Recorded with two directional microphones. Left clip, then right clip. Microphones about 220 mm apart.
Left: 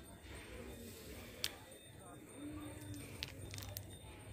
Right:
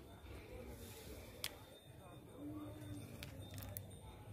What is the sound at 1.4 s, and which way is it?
Tick-tock, 50° right (ahead or behind).